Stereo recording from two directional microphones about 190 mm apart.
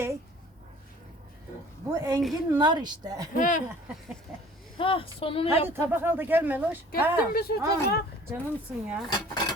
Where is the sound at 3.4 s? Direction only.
45° left (ahead or behind).